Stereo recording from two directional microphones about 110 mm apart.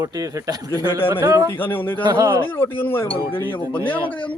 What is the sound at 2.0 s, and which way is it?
Speech, 35° right (ahead or behind).